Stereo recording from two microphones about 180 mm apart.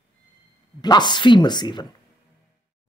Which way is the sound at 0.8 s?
25° left (ahead or behind).